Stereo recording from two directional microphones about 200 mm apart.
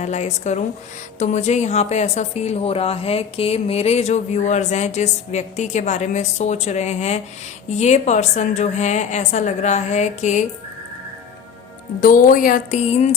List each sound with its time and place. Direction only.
0.0 s speech: 35° left (ahead or behind)
11.9 s speech: 40° left (ahead or behind)